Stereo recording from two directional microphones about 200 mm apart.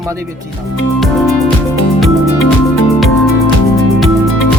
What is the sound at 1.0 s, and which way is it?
Music, centre (ahead or behind).